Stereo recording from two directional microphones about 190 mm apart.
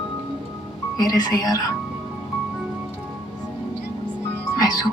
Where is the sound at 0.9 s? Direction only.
20° left (ahead or behind).